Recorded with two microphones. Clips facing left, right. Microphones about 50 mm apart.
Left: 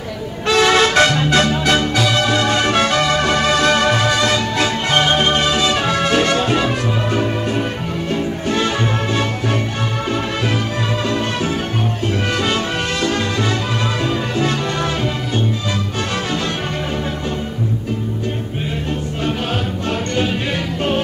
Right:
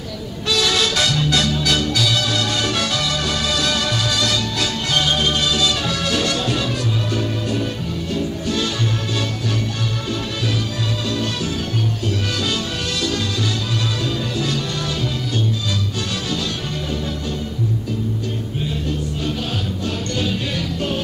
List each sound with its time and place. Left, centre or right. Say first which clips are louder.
0.5 s music: left 6 dB; left
11.1 s music: left 4 dB; left
13.0 s music: left 3 dB; left